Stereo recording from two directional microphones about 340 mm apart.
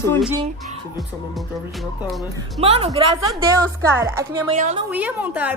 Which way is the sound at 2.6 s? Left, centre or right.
Centre.